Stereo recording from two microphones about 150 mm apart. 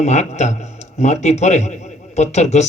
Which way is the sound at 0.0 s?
50° left (ahead or behind).